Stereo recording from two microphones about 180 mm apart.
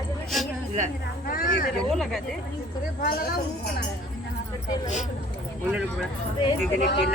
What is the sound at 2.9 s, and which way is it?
Speech, 50° left (ahead or behind).